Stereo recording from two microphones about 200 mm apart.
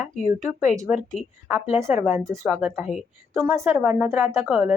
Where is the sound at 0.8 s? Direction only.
5° right (ahead or behind).